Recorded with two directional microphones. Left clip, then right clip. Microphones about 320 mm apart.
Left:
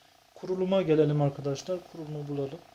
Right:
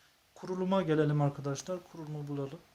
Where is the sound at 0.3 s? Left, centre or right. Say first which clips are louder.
Left 5 dB; right.